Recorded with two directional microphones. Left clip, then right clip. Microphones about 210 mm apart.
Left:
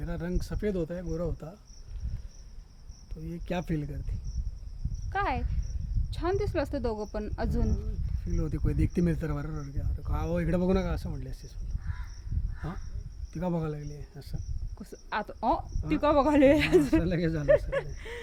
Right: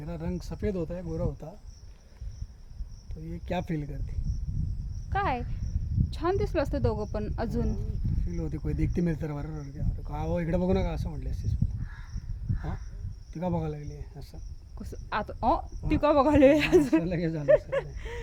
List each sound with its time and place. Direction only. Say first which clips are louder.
0.0 s speech: left 1 dB; 15° left (ahead or behind)
3.2 s speech: right 1 dB; 15° left (ahead or behind)
5.0 s a woman's voice: right 1 dB; 15° right (ahead or behind)
8.3 s speech: left 2 dB; 15° left (ahead or behind)
13.3 s speech: right 1 dB; 15° left (ahead or behind)
14.8 s a woman's voice: right 1 dB; 15° right (ahead or behind)
17.0 s speech: left 1 dB; 20° left (ahead or behind)
17.7 s a woman's voice: right 1 dB; 5° right (ahead or behind)